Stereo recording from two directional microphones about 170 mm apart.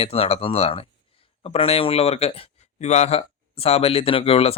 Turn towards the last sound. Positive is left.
turn(degrees=35)  # may be behind; listen again after turning